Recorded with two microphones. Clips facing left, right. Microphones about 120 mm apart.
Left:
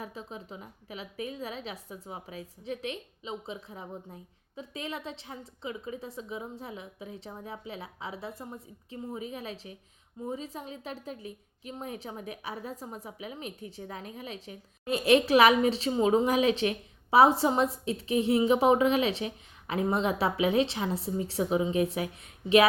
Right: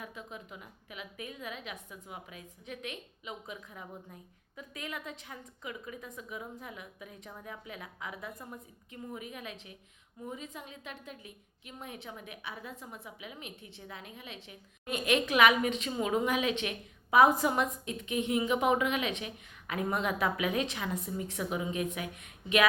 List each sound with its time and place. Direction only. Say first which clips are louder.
0.0 s a woman's voice: left 4 dB; 35° left (ahead or behind)